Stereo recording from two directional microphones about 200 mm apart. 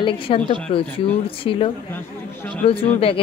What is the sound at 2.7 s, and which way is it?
Speech, 30° left (ahead or behind).